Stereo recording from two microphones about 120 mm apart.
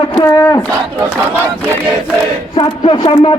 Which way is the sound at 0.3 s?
25° left (ahead or behind).